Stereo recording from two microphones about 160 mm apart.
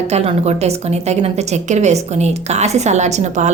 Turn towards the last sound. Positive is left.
turn(degrees=-45)  # may be behind; listen again after turning